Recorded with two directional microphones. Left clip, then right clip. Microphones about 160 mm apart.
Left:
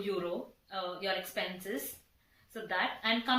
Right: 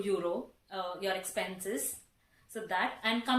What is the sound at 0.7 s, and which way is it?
Speech, 35° right (ahead or behind).